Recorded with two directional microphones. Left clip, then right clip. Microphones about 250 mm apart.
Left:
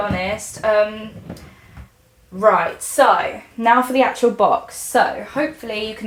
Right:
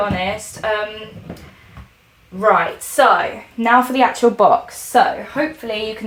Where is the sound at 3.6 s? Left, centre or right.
Right.